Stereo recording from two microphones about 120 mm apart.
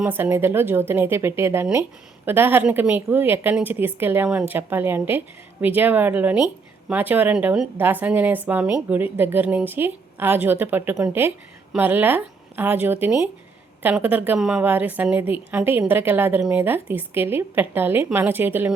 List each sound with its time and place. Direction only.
0.1 s a woman's voice: 20° right (ahead or behind)
7.8 s a woman's voice: 15° right (ahead or behind)